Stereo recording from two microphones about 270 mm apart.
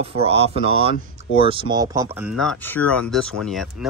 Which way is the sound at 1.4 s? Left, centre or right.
Centre.